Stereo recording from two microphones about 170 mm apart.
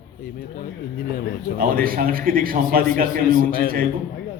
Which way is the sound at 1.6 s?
55° right (ahead or behind).